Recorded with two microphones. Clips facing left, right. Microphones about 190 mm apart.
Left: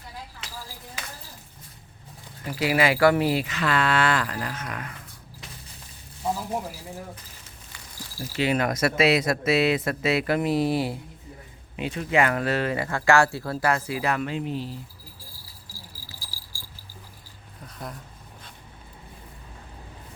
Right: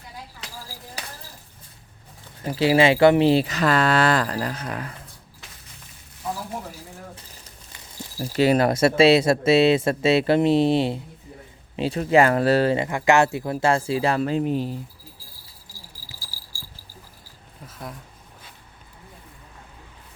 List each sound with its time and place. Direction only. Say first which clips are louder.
2.4 s speech: right 5 dB; 30° right (ahead or behind)
6.2 s a sound: left 3 dB; 25° left (ahead or behind)
8.4 s speech: right 6 dB; 35° right (ahead or behind)
12.7 s speech: right 2 dB; 20° right (ahead or behind); by 14.7 s 50° right (ahead or behind)
16.2 s keys jangling: even; 20° left (ahead or behind)
17.7 s speech: right 1 dB; centre (ahead or behind)